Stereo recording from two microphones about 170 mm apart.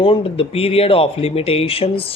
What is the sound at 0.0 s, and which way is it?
Speech, 35° left (ahead or behind).